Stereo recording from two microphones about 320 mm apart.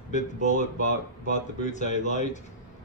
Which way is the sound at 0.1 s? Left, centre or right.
Left.